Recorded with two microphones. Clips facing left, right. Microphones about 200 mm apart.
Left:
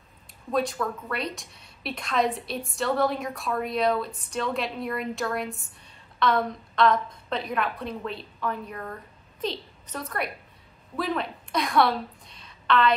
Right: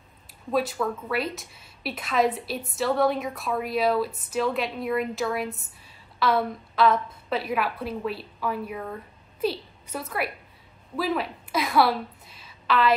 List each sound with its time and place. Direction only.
0.5 s a woman's voice: 5° right (ahead or behind)